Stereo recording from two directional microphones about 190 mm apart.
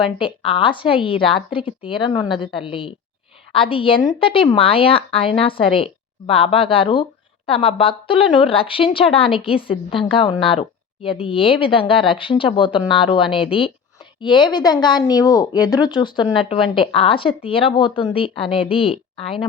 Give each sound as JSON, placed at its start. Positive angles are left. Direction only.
{"t": 0.0, "sound": "a woman's voice", "side_deg": 25}